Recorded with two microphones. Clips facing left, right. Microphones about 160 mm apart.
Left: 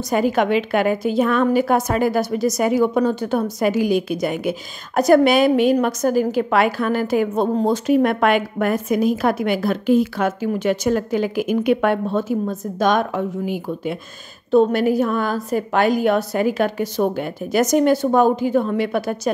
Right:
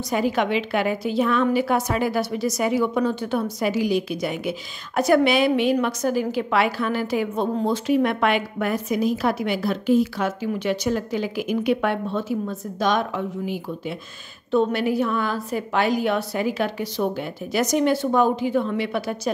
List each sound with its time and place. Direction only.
0.1 s a woman's voice: 50° left (ahead or behind)